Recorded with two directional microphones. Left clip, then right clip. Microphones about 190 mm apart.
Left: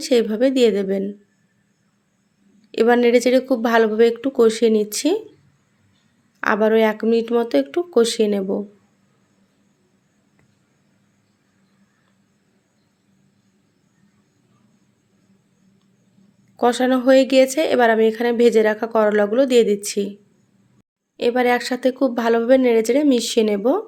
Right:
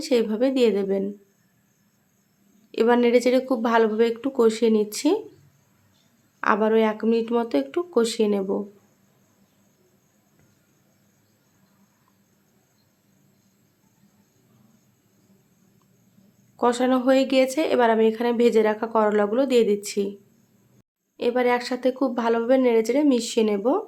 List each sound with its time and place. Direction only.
0.0 s a woman's voice: 15° left (ahead or behind)
2.7 s a woman's voice: 15° left (ahead or behind)
6.4 s a woman's voice: 15° left (ahead or behind)
16.6 s a woman's voice: 15° left (ahead or behind)
21.2 s a woman's voice: 20° left (ahead or behind)